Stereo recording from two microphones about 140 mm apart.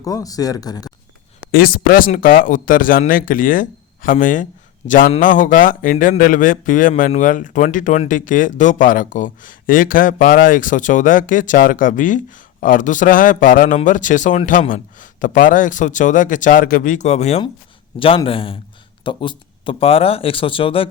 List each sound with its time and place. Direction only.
0.0 s speech: 25° left (ahead or behind)
1.5 s speech: 90° left; by 4.4 s 70° left (ahead or behind)
4.9 s a man's voice: 90° left
5.2 s speech: 70° left (ahead or behind); by 17.4 s 50° left (ahead or behind)
18.3 s a man's voice: 40° left (ahead or behind)